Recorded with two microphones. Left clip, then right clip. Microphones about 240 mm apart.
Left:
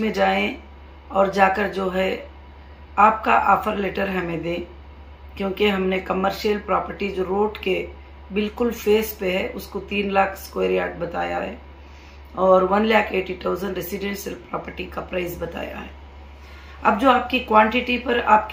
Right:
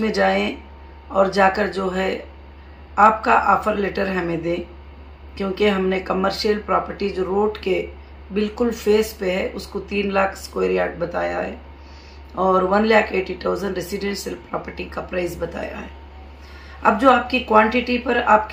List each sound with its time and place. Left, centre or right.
0.0 s speech: centre
16.8 s speech: centre